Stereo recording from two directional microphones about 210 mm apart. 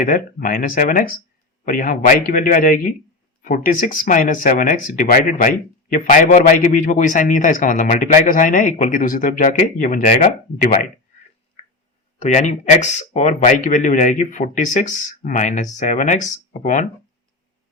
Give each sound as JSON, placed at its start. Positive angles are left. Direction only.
{"t": 0.0, "sound": "speech", "side_deg": 40}
{"t": 11.6, "sound": "a sound", "side_deg": 25}
{"t": 12.2, "sound": "speech", "side_deg": 35}